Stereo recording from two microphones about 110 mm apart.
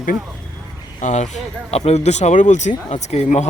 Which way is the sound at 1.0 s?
90° left.